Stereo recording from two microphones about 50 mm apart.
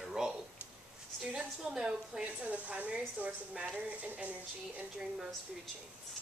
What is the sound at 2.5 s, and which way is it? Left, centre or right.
A woman's voice, right.